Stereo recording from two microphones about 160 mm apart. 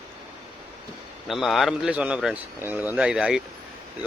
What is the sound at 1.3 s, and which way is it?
Speech, centre (ahead or behind).